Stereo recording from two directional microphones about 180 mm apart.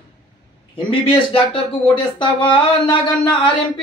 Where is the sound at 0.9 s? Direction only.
30° left (ahead or behind).